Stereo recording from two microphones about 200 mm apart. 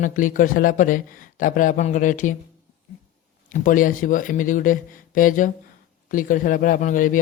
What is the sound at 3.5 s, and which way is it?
Speech, 40° left (ahead or behind).